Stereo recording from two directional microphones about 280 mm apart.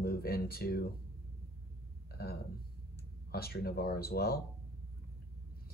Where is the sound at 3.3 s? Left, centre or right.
Left.